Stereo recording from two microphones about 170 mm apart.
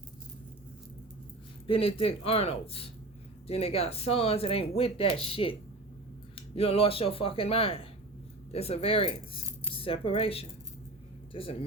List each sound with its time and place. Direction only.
1.6 s speech: 35° left (ahead or behind)